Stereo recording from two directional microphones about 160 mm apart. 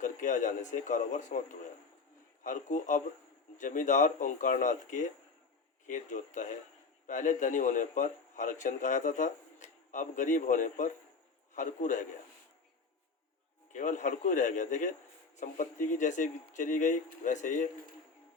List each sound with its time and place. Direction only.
0.0 s a man's voice: 55° left (ahead or behind)
13.7 s speech: 50° left (ahead or behind)